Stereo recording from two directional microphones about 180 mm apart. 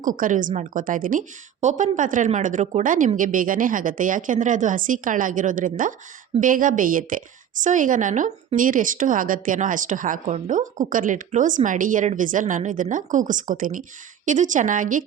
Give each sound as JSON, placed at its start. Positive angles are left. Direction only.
{"t": 0.0, "sound": "a woman's voice", "side_deg": -45}